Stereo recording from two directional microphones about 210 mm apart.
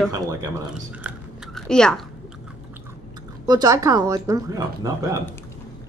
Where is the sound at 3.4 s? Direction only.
20° right (ahead or behind).